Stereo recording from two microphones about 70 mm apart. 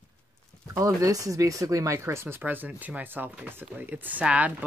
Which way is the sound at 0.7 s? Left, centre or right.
Right.